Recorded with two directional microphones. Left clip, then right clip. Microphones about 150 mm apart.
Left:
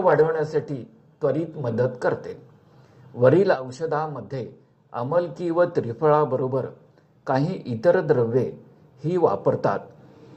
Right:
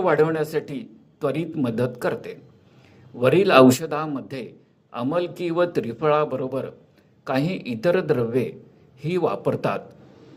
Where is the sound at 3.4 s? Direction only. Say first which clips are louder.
Right 8 dB; 20° right (ahead or behind).